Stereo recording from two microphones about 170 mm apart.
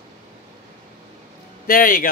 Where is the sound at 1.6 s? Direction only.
60° left (ahead or behind).